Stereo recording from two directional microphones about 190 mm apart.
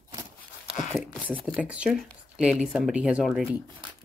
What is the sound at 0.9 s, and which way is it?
Speech, centre (ahead or behind).